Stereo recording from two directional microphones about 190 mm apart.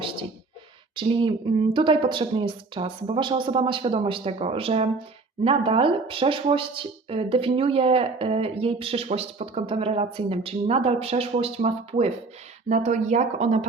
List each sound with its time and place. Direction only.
0.9 s speech: 25° right (ahead or behind)